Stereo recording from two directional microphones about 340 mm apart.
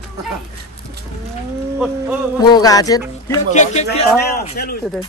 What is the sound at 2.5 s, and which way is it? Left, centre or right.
Speech, centre.